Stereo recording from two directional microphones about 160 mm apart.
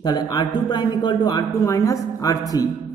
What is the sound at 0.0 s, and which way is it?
Speech, 25° left (ahead or behind).